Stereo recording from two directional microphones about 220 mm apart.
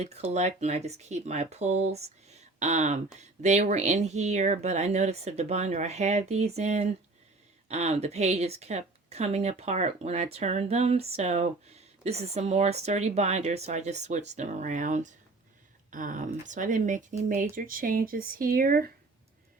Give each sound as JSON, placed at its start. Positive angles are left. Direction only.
{"t": 0.0, "sound": "speech", "side_deg": -30}